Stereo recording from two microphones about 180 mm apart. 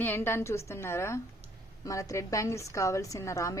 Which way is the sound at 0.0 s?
10° left (ahead or behind).